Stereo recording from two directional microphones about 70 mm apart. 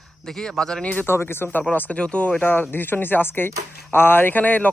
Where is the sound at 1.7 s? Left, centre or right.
Left.